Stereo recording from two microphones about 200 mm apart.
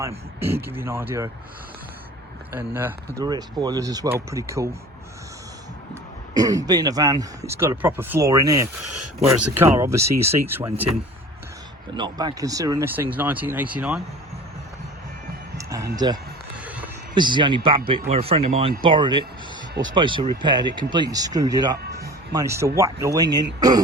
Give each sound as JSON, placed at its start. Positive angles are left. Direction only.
{"t": 0.3, "sound": "speech", "side_deg": -10}
{"t": 2.5, "sound": "speech", "side_deg": -10}
{"t": 5.9, "sound": "speech", "side_deg": -20}
{"t": 11.9, "sound": "speech", "side_deg": -20}
{"t": 15.5, "sound": "a sound", "side_deg": -15}
{"t": 16.6, "sound": "a sound", "side_deg": -10}
{"t": 17.2, "sound": "speech", "side_deg": -25}
{"t": 22.0, "sound": "music", "side_deg": -15}
{"t": 22.8, "sound": "speech", "side_deg": -15}